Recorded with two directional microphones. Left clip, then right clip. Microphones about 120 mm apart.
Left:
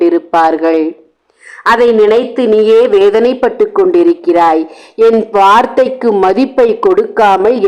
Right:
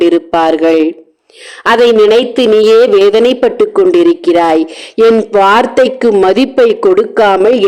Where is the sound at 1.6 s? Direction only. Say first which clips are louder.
Right 1 dB; 50° right (ahead or behind).